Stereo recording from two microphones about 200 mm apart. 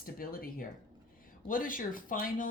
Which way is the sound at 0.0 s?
45° left (ahead or behind).